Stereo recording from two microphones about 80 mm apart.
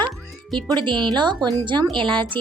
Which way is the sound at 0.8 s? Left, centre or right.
Right.